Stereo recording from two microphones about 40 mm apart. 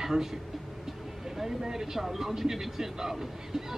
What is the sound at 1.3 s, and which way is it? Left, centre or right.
Speech, centre.